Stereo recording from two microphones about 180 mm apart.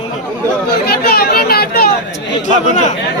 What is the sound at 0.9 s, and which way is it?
Speech, 60° left (ahead or behind).